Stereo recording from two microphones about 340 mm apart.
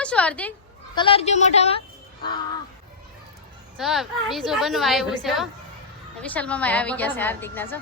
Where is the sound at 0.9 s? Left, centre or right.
Centre.